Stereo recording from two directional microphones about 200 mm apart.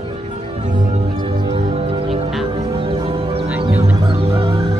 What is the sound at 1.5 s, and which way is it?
Music, 25° right (ahead or behind).